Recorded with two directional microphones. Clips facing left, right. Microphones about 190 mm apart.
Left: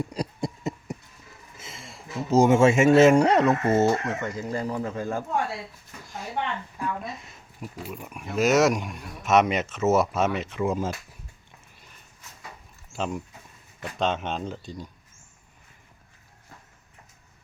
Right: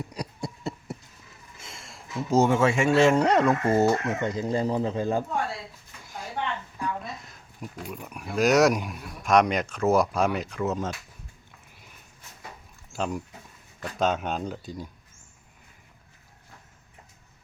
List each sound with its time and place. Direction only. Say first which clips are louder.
0.2 s a sound: left 4 dB; 20° left (ahead or behind)
1.5 s a sound: left 2 dB; 5° left (ahead or behind)
2.4 s speech: left 5 dB; 25° left (ahead or behind); by 4.1 s centre (ahead or behind)
4.2 s speech: right 3 dB; 20° right (ahead or behind)
6.7 s speech: left 1 dB; 5° left (ahead or behind)
12.9 s speech: even; centre (ahead or behind)